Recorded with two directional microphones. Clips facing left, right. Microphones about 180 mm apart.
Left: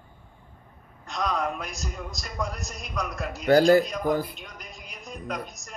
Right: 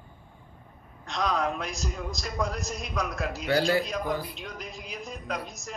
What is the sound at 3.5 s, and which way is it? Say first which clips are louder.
Speech: left 8 dB; 45° left (ahead or behind).